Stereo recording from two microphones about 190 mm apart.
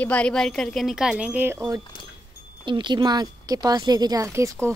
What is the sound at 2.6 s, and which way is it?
A woman's voice, 25° right (ahead or behind).